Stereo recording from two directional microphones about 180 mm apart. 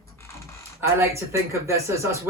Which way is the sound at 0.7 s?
15° right (ahead or behind).